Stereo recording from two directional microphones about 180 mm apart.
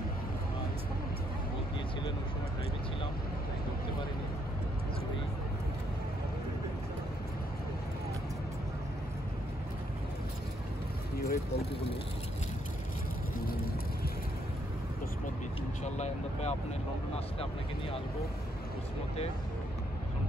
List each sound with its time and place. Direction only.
11.2 s vehicle: 55° left (ahead or behind)
15.8 s vehicle: 40° left (ahead or behind)